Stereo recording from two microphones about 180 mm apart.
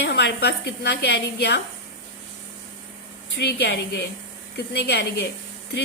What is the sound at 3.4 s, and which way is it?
A woman's voice, 65° left (ahead or behind).